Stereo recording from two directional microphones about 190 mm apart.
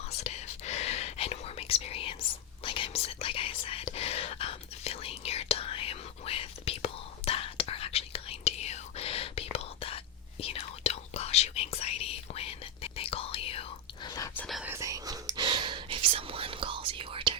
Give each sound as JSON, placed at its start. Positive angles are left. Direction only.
{"t": 0.2, "sound": "whispering", "side_deg": 35}
{"t": 14.3, "sound": "whispering", "side_deg": 0}
{"t": 14.6, "sound": "whispering", "side_deg": -15}